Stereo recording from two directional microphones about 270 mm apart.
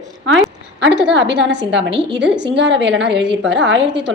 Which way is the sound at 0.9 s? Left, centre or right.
Centre.